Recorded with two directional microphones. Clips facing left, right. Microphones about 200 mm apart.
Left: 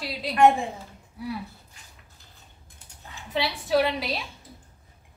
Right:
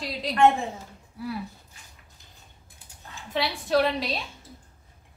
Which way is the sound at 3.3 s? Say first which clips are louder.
Left 1 dB; centre (ahead or behind).